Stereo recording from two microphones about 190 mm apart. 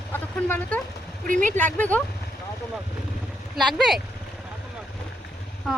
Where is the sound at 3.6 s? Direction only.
Centre (ahead or behind).